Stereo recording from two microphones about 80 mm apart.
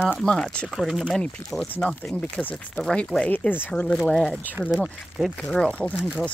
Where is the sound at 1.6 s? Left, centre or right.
Left.